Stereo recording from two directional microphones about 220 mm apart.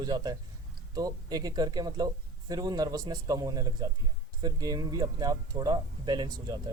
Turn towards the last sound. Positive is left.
turn(degrees=-20)  # may be behind; listen again after turning